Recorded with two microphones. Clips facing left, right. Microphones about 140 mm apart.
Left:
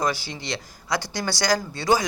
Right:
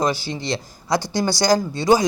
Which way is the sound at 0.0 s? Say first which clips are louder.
Right 4 dB; 25° right (ahead or behind).